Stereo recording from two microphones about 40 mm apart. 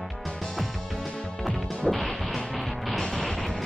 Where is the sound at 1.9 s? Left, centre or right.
Centre.